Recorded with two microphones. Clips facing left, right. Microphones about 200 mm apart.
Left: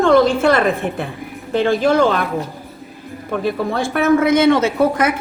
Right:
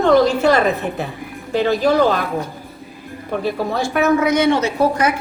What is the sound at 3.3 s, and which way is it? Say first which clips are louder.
Speech: left 1 dB; 50° left (ahead or behind).